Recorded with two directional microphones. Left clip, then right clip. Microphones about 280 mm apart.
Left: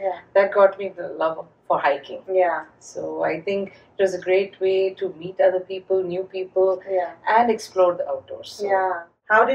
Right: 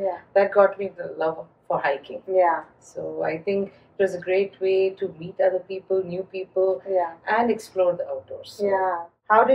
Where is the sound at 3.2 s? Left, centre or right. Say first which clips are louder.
Left 1 dB; centre.